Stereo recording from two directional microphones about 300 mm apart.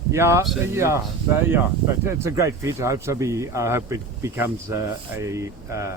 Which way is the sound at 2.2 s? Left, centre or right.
Centre.